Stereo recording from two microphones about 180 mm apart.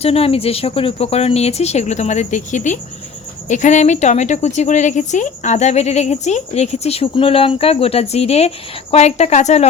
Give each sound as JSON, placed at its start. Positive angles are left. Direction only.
{"t": 0.0, "sound": "a woman's voice", "side_deg": 35}